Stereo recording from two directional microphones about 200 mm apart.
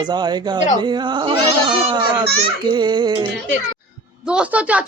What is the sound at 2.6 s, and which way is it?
Speech, 20° right (ahead or behind).